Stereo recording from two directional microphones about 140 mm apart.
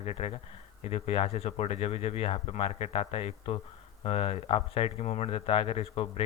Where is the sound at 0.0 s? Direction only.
45° left (ahead or behind).